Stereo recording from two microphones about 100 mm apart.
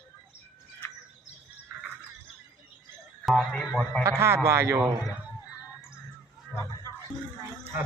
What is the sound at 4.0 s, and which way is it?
Speech, 25° right (ahead or behind).